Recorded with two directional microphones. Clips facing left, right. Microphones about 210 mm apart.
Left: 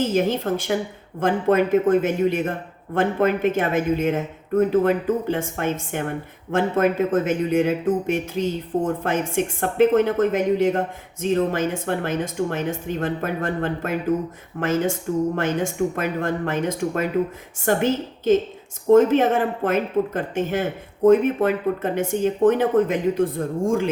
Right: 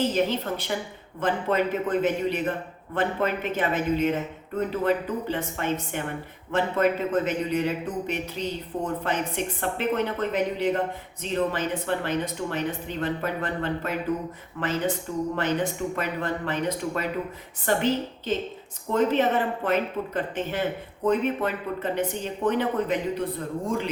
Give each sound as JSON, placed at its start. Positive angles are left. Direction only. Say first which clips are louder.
{"t": 0.0, "sound": "speech", "louder": "left 4 dB", "side_deg": 45}